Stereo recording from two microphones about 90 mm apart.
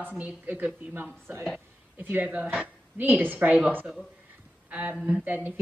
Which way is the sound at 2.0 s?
20° right (ahead or behind).